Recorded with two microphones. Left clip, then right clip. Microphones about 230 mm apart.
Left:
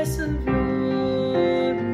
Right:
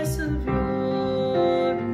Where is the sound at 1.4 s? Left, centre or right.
Centre.